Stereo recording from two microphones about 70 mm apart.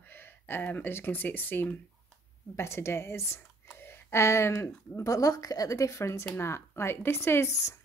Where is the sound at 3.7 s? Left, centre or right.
Left.